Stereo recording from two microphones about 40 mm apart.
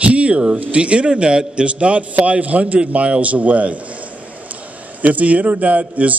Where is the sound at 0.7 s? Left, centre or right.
Right.